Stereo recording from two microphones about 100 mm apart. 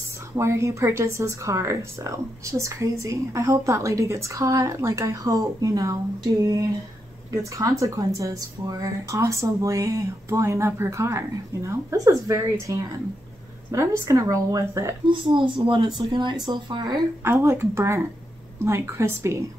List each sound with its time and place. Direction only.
0.4 s speech: 30° right (ahead or behind)
7.8 s speech: 35° right (ahead or behind)
15.0 s speech: 55° right (ahead or behind)
17.2 s speech: 25° right (ahead or behind)